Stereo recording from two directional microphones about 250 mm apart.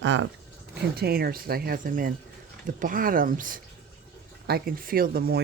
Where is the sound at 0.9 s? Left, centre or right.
Right.